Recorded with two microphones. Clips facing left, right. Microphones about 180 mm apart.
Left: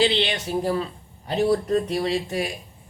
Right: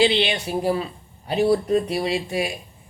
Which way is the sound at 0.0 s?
10° right (ahead or behind).